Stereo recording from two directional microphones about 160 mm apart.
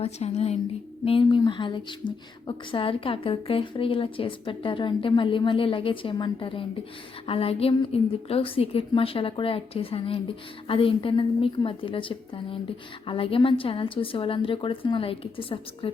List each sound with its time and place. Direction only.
0.0 s a woman's voice: 40° left (ahead or behind)